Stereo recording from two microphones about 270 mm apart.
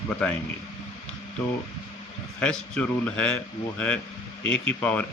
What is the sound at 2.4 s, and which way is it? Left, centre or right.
Speech, centre.